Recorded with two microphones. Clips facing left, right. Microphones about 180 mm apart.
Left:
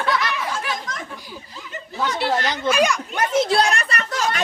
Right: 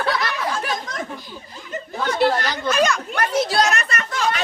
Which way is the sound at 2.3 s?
20° left (ahead or behind).